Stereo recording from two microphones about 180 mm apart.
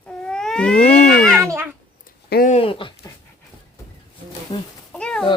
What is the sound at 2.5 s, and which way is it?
Speech, 30° left (ahead or behind).